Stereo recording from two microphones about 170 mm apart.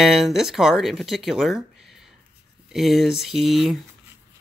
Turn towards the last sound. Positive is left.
turn(degrees=0)  # may be behind; listen again after turning